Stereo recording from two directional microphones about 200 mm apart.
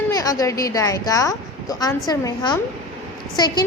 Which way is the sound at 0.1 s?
15° left (ahead or behind).